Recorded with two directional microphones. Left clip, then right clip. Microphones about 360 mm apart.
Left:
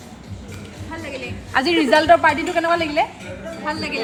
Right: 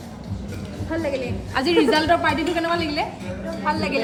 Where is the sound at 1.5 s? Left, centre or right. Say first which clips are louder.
Left 3 dB; centre.